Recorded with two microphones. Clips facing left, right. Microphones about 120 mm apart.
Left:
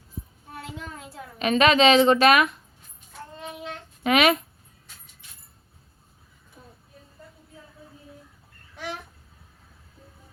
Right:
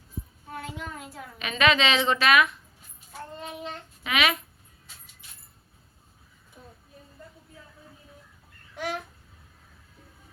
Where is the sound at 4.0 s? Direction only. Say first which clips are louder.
Left 7 dB; 45° left (ahead or behind).